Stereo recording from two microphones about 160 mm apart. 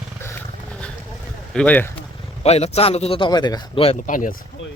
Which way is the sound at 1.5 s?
10° left (ahead or behind).